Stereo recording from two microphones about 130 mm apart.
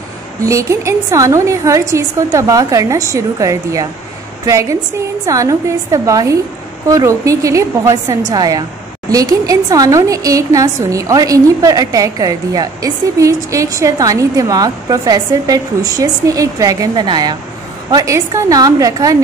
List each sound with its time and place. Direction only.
0.4 s speech: 25° right (ahead or behind)